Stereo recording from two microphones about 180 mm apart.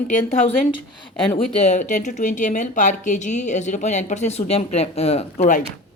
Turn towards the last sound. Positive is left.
turn(degrees=45)  # may be behind; listen again after turning